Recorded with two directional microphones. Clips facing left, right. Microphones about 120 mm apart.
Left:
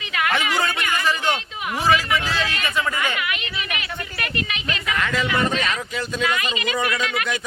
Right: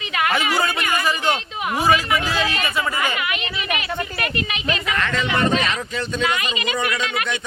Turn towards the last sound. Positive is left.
turn(degrees=-25)  # may be behind; listen again after turning